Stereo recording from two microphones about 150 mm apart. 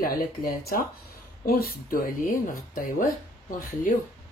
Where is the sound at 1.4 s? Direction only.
85° left; by 3.1 s 65° left (ahead or behind).